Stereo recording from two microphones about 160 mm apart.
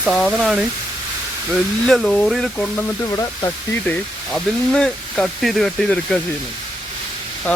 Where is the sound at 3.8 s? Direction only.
5° left (ahead or behind).